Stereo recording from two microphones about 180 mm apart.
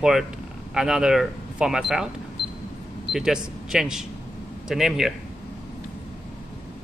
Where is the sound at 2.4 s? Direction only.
75° right (ahead or behind).